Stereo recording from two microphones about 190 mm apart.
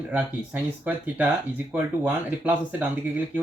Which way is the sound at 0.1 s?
10° right (ahead or behind).